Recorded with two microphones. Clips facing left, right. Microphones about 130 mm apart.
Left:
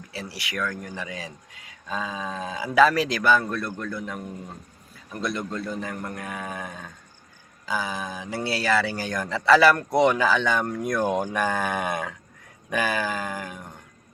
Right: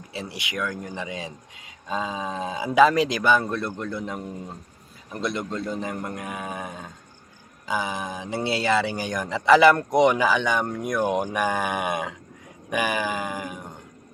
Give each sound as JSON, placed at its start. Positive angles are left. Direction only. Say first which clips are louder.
{"t": 0.1, "sound": "speech", "louder": "right 2 dB", "side_deg": -20}